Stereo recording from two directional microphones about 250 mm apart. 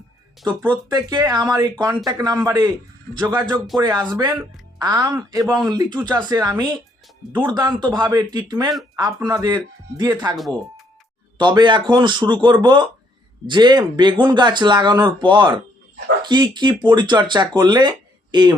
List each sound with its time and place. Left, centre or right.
0.6 s speech: centre
11.3 s speech: centre